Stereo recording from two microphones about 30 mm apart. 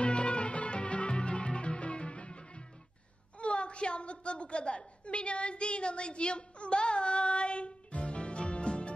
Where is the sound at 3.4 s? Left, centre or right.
Left.